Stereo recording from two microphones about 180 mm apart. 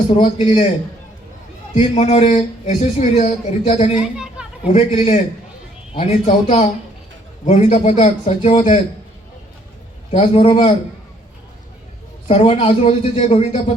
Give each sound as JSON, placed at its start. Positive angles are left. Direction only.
{"t": 0.1, "sound": "a man's voice", "side_deg": 35}
{"t": 1.7, "sound": "a man's voice", "side_deg": 35}
{"t": 4.0, "sound": "speech", "side_deg": -5}
{"t": 4.7, "sound": "a man's voice", "side_deg": 35}
{"t": 10.1, "sound": "a man's voice", "side_deg": 30}
{"t": 12.3, "sound": "a man's voice", "side_deg": 30}